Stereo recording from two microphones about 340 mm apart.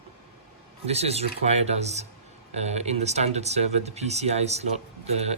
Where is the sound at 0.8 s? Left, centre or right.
Centre.